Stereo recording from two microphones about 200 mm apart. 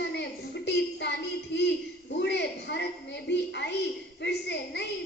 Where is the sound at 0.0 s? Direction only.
60° left (ahead or behind).